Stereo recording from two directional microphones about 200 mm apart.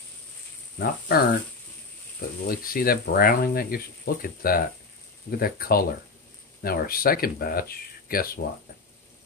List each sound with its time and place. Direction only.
0.7 s speech: 50° left (ahead or behind)
2.4 s speech: 45° left (ahead or behind)